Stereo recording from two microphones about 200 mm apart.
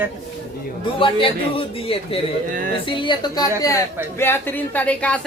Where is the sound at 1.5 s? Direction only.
30° left (ahead or behind).